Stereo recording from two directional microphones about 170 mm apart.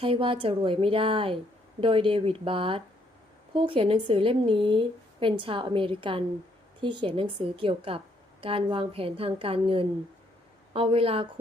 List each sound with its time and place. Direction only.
0.0 s a woman's voice: 30° right (ahead or behind)